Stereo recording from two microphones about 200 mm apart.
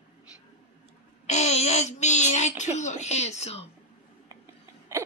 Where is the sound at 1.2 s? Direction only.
35° left (ahead or behind).